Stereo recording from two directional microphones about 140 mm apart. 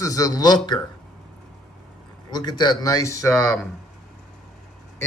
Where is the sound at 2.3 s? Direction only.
30° left (ahead or behind).